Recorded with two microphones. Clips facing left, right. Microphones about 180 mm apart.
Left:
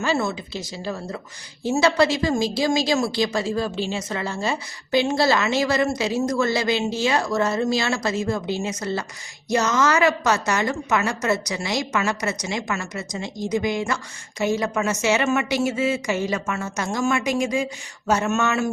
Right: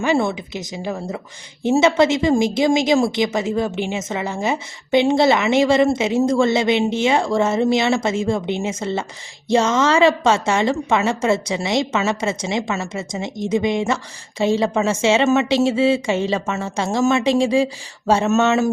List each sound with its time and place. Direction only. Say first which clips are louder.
0.0 s a woman's voice: right 5 dB; 20° right (ahead or behind)